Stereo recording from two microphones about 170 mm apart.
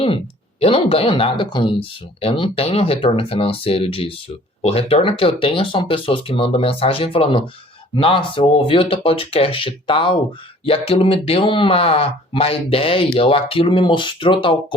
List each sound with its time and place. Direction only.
0.6 s speech: 35° left (ahead or behind)